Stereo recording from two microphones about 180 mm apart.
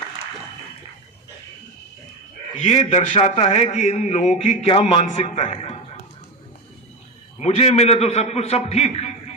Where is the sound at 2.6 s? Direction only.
30° left (ahead or behind).